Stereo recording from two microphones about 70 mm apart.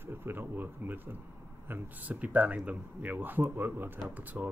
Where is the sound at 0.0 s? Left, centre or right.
Right.